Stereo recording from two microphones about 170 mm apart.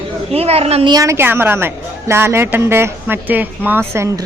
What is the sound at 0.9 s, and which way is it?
A woman's voice, 15° right (ahead or behind).